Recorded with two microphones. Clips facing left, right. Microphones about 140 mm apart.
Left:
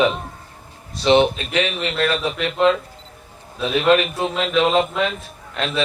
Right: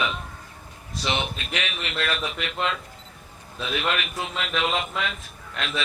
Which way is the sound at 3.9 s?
30° left (ahead or behind).